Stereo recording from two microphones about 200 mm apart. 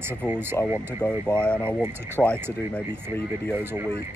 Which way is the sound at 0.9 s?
10° left (ahead or behind).